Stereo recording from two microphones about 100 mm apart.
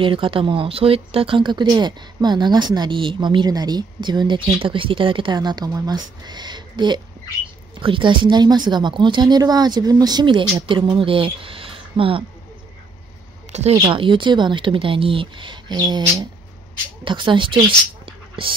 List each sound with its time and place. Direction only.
0.0 s speech: 60° right (ahead or behind)
4.6 s speech: 60° right (ahead or behind)
13.6 s speech: 80° right; by 17.6 s 55° right (ahead or behind)